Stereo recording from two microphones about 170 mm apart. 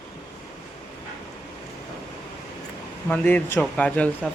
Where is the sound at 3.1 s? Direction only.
10° left (ahead or behind).